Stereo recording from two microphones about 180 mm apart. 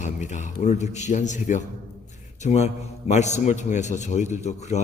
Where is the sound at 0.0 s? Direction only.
40° left (ahead or behind).